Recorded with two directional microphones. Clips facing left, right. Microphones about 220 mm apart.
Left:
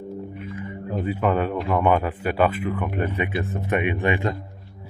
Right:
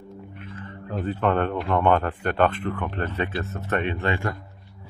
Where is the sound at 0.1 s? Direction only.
10° left (ahead or behind).